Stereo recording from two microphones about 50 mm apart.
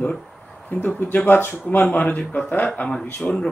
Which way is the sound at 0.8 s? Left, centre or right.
Left.